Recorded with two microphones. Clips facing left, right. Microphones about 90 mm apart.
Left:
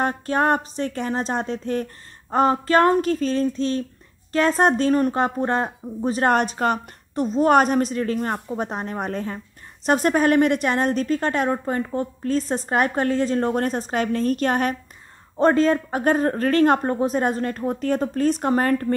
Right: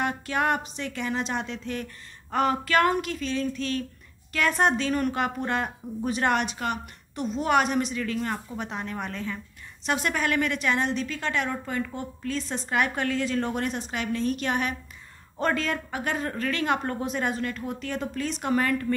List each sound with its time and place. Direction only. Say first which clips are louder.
0.0 s a woman's voice: left 5 dB; 40° left (ahead or behind)